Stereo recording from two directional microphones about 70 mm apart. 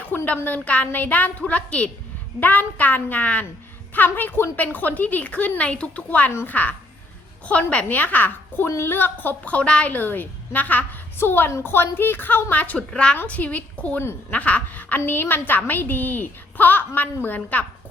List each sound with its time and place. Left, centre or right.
0.1 s a sound: left
0.4 s a woman's voice: left
12.9 s a woman's voice: centre
14.0 s a woman's voice: left
14.3 s a woman's voice: left